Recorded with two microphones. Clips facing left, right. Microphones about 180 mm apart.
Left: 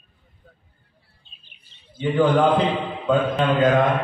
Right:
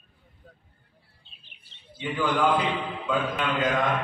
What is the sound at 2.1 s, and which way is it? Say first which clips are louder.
Mantra: left 7 dB; 55° left (ahead or behind).